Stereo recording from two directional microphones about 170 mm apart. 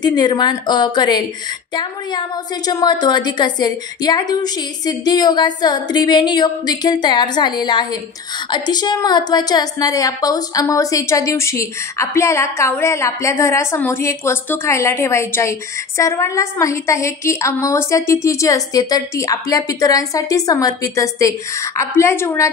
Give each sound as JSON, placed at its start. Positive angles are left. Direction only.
{"t": 0.0, "sound": "a woman's voice", "side_deg": 25}